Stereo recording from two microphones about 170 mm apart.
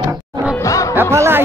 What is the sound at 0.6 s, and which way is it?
Music, 20° left (ahead or behind).